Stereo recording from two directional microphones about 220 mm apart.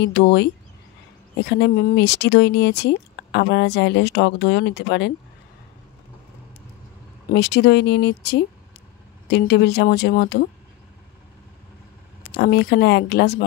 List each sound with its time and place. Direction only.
0.0 s speech: 50° left (ahead or behind)
7.3 s speech: 50° left (ahead or behind)
12.3 s speech: 50° left (ahead or behind)